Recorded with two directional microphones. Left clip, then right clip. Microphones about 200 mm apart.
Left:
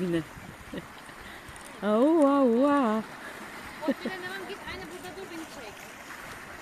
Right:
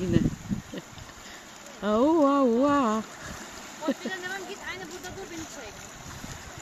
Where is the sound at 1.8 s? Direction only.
Centre (ahead or behind).